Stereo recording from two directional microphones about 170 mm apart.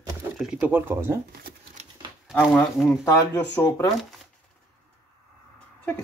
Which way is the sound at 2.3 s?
10° left (ahead or behind).